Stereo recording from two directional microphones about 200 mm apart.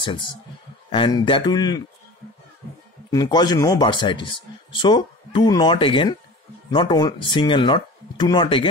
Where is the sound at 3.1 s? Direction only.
20° left (ahead or behind).